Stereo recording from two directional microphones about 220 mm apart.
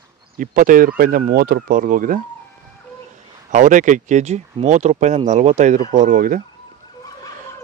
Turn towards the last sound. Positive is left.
turn(degrees=-35)  # may be behind; listen again after turning